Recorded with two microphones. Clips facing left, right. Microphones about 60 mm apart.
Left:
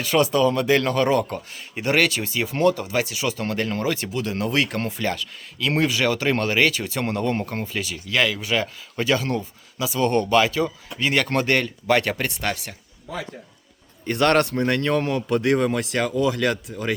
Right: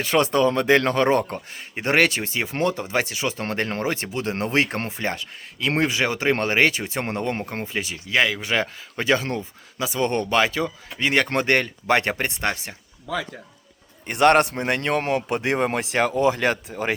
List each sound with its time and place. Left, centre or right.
0.0 s a man's voice: right
14.0 s a man's voice: right